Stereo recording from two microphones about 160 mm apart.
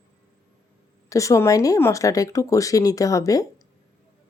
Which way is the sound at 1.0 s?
20° left (ahead or behind).